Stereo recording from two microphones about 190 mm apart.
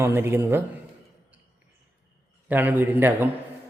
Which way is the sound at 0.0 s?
10° right (ahead or behind).